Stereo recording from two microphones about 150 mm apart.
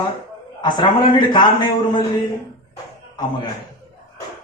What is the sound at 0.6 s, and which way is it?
A man's voice, 30° left (ahead or behind).